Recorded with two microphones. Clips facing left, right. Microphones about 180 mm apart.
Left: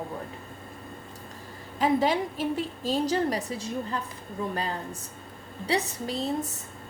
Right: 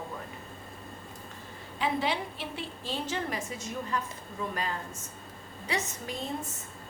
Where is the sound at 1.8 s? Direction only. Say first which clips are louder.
Left 6 dB; 45° left (ahead or behind).